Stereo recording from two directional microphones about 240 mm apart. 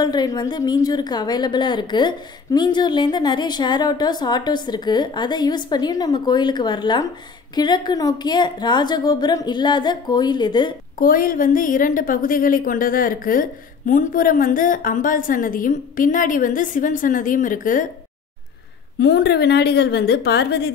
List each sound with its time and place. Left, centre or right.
0.0 s a woman's voice: centre
11.0 s a woman's voice: left
18.9 s a woman's voice: left